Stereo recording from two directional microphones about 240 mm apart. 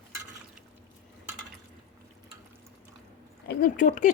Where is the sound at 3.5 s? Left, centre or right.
Left.